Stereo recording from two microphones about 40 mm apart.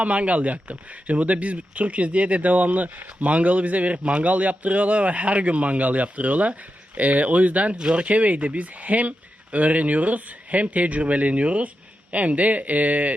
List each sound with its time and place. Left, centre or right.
0.0 s speech: right
7.8 s speech: centre
8.0 s speech: right